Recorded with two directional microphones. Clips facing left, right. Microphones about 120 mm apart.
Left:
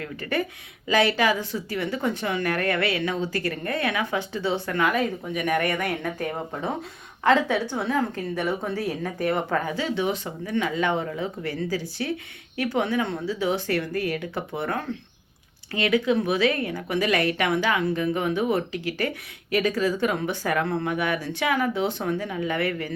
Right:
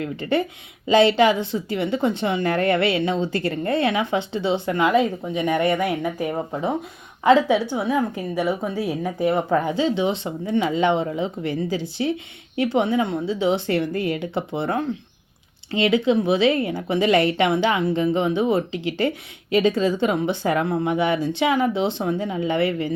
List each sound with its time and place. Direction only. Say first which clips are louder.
0.0 s a woman's voice: right 5 dB; 25° right (ahead or behind)